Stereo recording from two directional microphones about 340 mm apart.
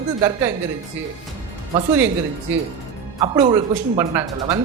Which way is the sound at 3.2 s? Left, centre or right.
Centre.